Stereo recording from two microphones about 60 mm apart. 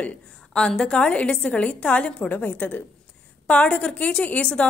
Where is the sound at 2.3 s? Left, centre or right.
Left.